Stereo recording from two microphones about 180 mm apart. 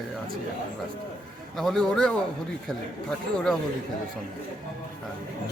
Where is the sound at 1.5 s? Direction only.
Centre (ahead or behind).